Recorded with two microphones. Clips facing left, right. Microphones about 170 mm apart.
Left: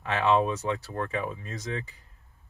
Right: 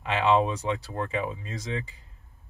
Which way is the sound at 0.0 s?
15° right (ahead or behind).